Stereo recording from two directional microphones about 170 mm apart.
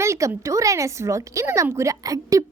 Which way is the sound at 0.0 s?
15° right (ahead or behind).